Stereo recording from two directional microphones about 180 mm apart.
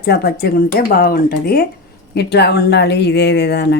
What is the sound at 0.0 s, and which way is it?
Speech, 60° left (ahead or behind).